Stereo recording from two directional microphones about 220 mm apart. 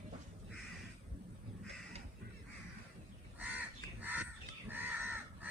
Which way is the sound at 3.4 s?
10° right (ahead or behind).